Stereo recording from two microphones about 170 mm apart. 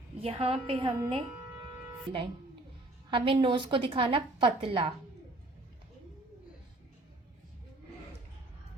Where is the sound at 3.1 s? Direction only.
30° right (ahead or behind).